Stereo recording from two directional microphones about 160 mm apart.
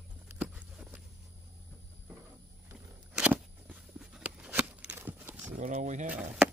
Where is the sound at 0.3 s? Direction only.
10° right (ahead or behind).